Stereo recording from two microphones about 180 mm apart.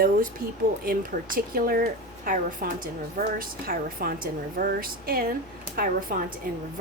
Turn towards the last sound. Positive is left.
turn(degrees=-50)  # may be behind; listen again after turning